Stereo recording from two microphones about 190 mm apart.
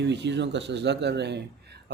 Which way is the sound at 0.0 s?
65° right (ahead or behind).